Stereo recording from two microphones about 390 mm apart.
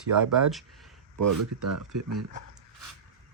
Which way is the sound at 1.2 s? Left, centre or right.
Right.